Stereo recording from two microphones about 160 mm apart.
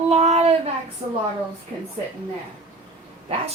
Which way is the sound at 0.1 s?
45° right (ahead or behind).